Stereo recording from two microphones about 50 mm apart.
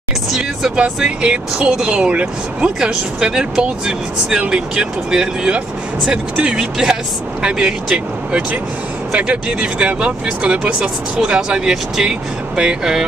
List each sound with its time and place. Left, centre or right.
1.0 s speech: right